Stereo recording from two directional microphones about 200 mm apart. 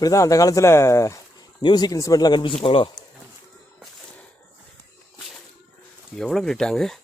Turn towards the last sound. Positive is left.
turn(degrees=0)  # may be behind; listen again after turning